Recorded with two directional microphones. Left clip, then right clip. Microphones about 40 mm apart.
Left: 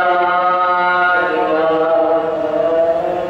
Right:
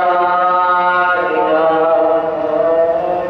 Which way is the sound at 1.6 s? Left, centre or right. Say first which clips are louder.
Right 2 dB; right.